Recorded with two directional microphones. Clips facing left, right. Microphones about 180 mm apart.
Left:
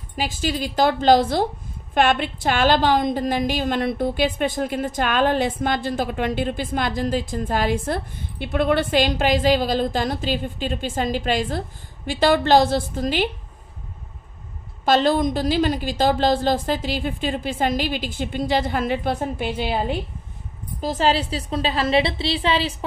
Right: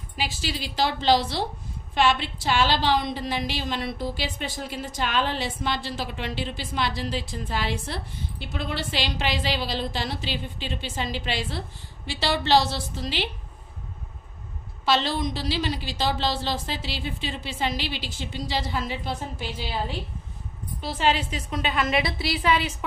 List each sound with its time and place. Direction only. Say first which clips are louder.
0.1 s a woman's voice: left 6 dB; 45° left (ahead or behind)
14.9 s a woman's voice: left 7 dB; 50° left (ahead or behind)
20.8 s a woman's voice: left 4 dB; 40° left (ahead or behind)